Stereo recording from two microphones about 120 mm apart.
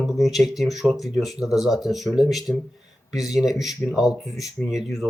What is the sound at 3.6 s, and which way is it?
Speech, centre (ahead or behind).